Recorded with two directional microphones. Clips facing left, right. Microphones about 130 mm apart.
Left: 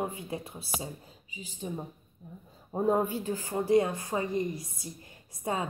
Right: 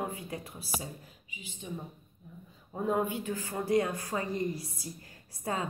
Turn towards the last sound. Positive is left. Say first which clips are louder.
# left 2 dB
turn(degrees=20)  # may be behind; listen again after turning